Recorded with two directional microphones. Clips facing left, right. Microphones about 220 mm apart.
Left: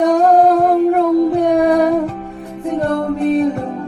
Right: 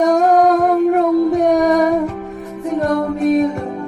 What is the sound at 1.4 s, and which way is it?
Music, 30° left (ahead or behind).